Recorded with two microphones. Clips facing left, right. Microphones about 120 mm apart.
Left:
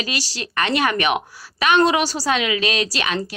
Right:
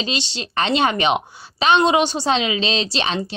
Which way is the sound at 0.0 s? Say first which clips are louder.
Right 2 dB; 25° right (ahead or behind).